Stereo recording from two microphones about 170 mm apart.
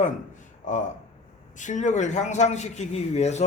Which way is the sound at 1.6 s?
45° left (ahead or behind).